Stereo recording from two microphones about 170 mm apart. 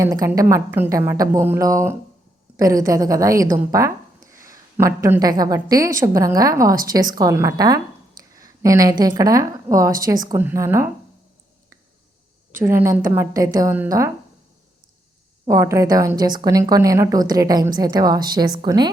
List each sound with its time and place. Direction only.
0.0 s a woman's voice: 20° right (ahead or behind)
12.5 s a woman's voice: 15° right (ahead or behind)
15.4 s a woman's voice: 20° right (ahead or behind)